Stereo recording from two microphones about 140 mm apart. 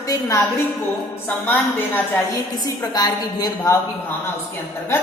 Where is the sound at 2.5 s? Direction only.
25° left (ahead or behind).